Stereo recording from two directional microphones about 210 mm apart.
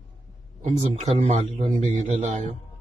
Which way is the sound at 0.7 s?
30° right (ahead or behind).